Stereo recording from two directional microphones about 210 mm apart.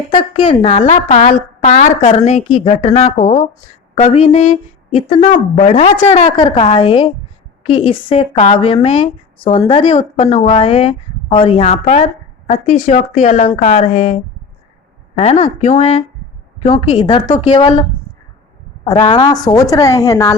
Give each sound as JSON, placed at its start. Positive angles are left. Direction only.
{"t": 0.1, "sound": "a woman's voice", "side_deg": 25}
{"t": 17.2, "sound": "a woman's voice", "side_deg": 35}
{"t": 17.5, "sound": "speech", "side_deg": 20}
{"t": 18.9, "sound": "a woman's voice", "side_deg": 20}